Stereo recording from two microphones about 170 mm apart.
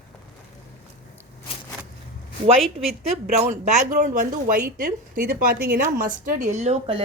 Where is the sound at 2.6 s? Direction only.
Centre (ahead or behind).